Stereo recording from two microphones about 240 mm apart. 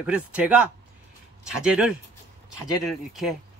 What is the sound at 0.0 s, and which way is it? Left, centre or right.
A man's voice, centre.